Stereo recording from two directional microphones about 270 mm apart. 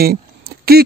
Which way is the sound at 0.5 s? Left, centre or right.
Right.